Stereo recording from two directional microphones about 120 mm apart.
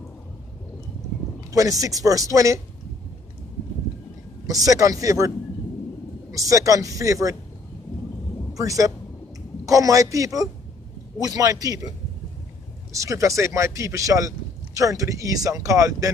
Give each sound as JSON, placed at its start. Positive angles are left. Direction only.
{"t": 1.5, "sound": "speech", "side_deg": -30}
{"t": 4.5, "sound": "speech", "side_deg": -30}
{"t": 6.3, "sound": "speech", "side_deg": -25}
{"t": 8.5, "sound": "speech", "side_deg": -30}
{"t": 12.9, "sound": "speech", "side_deg": -25}